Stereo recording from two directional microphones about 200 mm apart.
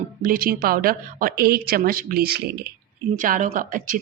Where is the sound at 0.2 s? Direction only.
45° right (ahead or behind).